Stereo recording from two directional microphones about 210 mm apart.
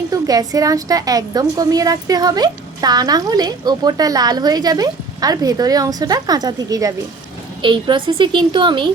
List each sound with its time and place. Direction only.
0.1 s a woman's voice: 15° right (ahead or behind)